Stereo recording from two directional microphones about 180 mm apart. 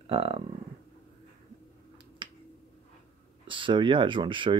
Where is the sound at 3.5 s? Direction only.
30° right (ahead or behind).